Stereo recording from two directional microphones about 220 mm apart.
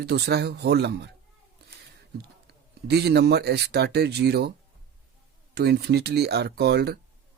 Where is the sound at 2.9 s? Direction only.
50° right (ahead or behind).